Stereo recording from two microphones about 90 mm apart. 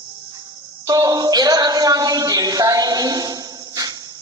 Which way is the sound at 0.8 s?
45° right (ahead or behind).